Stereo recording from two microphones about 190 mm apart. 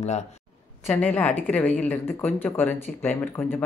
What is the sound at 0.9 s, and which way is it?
A woman's voice, 10° left (ahead or behind).